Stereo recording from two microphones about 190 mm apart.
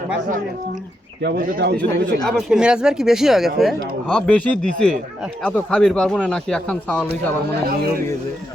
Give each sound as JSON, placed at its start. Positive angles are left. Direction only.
{"t": 1.2, "sound": "speech", "side_deg": -55}
{"t": 2.2, "sound": "speech", "side_deg": -5}